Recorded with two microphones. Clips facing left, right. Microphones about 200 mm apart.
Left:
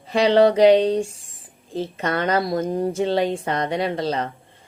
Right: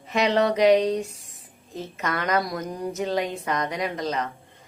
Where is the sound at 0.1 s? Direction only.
30° left (ahead or behind).